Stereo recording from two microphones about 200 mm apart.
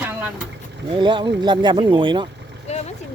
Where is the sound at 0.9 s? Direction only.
25° right (ahead or behind).